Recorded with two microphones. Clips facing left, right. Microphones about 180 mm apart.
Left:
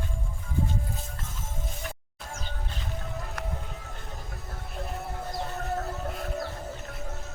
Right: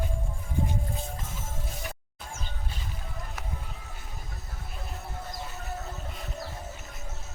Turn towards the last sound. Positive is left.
turn(degrees=55)  # may be behind; listen again after turning